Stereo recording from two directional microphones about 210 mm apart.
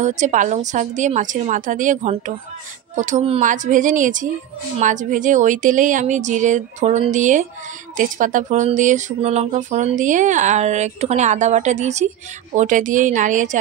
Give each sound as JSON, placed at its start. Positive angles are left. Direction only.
{"t": 0.0, "sound": "speech", "side_deg": -35}